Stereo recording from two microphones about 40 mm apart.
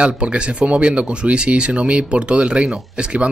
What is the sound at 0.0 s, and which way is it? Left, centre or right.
Speech, right.